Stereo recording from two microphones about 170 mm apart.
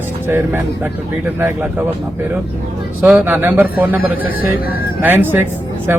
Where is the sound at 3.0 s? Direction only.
5° right (ahead or behind).